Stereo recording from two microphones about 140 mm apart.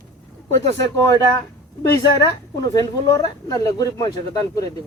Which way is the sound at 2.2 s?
25° left (ahead or behind).